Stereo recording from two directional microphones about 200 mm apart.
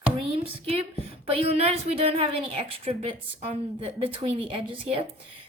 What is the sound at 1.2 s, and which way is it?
A woman's voice, 30° right (ahead or behind).